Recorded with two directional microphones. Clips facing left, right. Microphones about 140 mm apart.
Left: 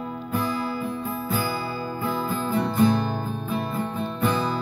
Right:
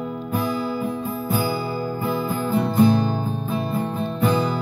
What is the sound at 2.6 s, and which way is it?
Music, 10° right (ahead or behind).